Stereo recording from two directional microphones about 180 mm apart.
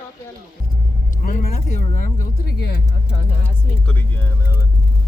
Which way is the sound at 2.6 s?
65° left (ahead or behind).